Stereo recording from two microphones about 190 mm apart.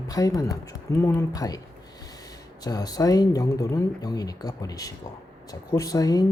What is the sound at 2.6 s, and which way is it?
Speech, 20° left (ahead or behind).